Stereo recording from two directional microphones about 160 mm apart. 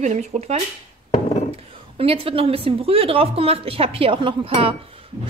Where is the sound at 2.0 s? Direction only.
35° right (ahead or behind).